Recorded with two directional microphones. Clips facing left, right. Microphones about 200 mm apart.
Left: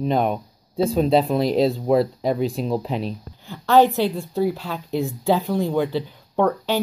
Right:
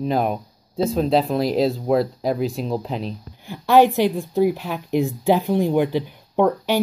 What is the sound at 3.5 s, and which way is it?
Speech, 15° right (ahead or behind).